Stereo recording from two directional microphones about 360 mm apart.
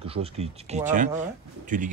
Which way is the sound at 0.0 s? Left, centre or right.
Centre.